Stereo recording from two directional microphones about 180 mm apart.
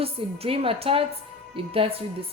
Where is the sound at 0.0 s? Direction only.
30° right (ahead or behind).